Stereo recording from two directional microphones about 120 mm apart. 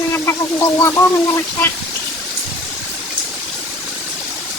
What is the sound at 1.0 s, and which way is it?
Speech, 20° left (ahead or behind).